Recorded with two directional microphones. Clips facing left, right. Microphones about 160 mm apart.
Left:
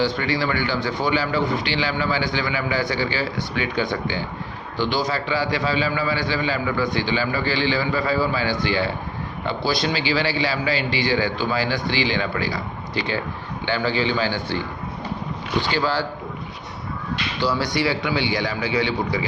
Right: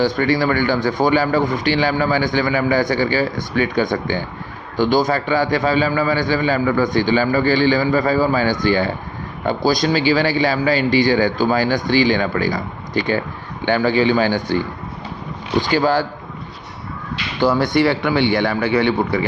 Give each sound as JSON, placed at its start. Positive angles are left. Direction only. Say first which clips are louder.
{"t": 0.0, "sound": "speech", "louder": "right 5 dB", "side_deg": -45}
{"t": 15.7, "sound": "speech", "louder": "right 7 dB", "side_deg": -45}
{"t": 17.4, "sound": "speech", "louder": "right 7 dB", "side_deg": -50}